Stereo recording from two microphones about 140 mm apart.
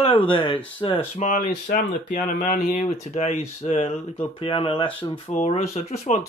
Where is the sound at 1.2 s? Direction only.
70° left (ahead or behind); by 5.2 s 40° left (ahead or behind).